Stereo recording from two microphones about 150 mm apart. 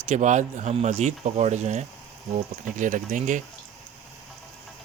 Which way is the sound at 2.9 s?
60° right (ahead or behind).